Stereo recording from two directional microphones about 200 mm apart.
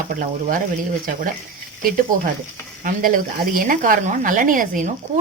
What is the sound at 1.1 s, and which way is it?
A woman's voice, 40° right (ahead or behind).